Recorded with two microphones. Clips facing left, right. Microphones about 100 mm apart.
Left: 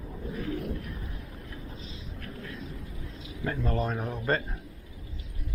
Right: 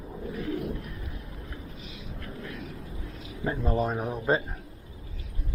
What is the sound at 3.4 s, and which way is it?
Speech, 15° right (ahead or behind).